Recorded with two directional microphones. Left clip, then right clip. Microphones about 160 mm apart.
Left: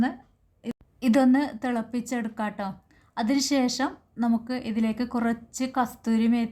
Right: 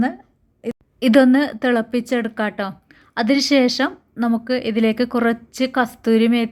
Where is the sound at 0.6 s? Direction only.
25° right (ahead or behind).